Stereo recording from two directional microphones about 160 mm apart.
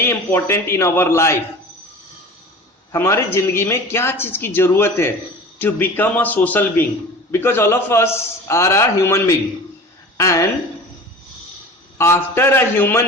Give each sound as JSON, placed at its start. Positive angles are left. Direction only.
{"t": 0.0, "sound": "speech", "side_deg": 15}
{"t": 2.9, "sound": "a woman's voice", "side_deg": 15}
{"t": 11.9, "sound": "speech", "side_deg": 15}